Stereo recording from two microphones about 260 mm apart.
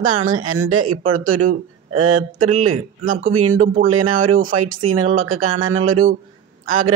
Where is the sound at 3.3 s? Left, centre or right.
Right.